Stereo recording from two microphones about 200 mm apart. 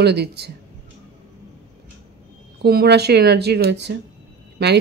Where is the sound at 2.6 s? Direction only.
50° right (ahead or behind).